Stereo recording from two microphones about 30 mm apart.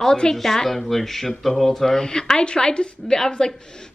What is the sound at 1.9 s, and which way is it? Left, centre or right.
Speech, centre.